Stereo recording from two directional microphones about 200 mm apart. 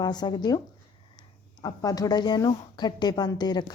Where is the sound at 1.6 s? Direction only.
20° left (ahead or behind).